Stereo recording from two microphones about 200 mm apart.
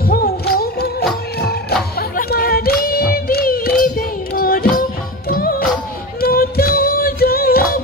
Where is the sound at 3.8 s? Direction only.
45° left (ahead or behind).